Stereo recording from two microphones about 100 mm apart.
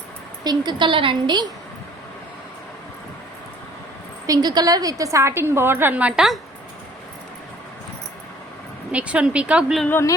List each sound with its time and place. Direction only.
0.4 s a woman's voice: 45° right (ahead or behind)
4.3 s a woman's voice: 40° right (ahead or behind); by 6.2 s 15° right (ahead or behind)
8.9 s speech: 10° right (ahead or behind)
9.9 s a sound: 30° left (ahead or behind)